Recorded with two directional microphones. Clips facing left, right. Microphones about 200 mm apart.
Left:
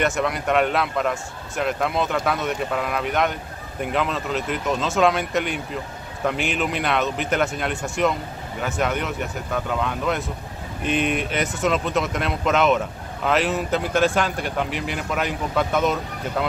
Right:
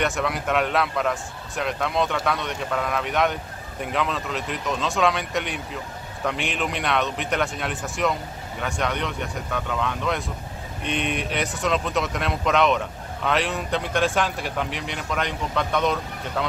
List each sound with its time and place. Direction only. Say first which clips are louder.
0.0 s speech: left 2 dB; centre (ahead or behind)